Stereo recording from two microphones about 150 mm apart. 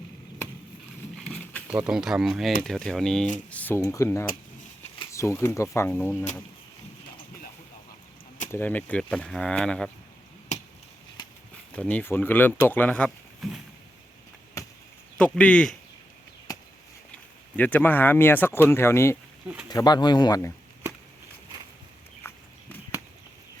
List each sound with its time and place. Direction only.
1.2 s a sound: 10° left (ahead or behind)
1.6 s speech: 5° right (ahead or behind); by 6.1 s 15° left (ahead or behind)
8.5 s speech: 10° left (ahead or behind)
11.8 s speech: 10° left (ahead or behind)
13.4 s speech: centre (ahead or behind)
14.6 s chop: 20° left (ahead or behind)
15.2 s speech: 5° left (ahead or behind)
17.6 s speech: 10° left (ahead or behind)
19.6 s speech: 30° left (ahead or behind)
22.3 s walk: 15° left (ahead or behind)